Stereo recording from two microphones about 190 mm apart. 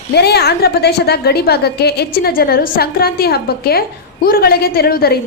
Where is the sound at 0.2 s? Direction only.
60° left (ahead or behind).